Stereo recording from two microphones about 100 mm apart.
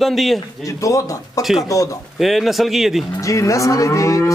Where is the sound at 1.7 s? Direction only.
35° left (ahead or behind).